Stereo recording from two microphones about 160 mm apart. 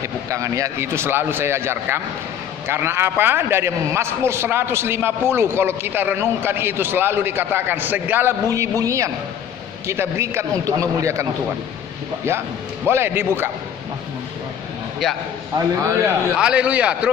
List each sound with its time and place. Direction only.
0.0 s a man's voice: 20° right (ahead or behind)
12.3 s a man's voice: 15° right (ahead or behind)
15.0 s a man's voice: centre (ahead or behind)
15.5 s a man's voice: 20° right (ahead or behind)
16.3 s a man's voice: 5° right (ahead or behind)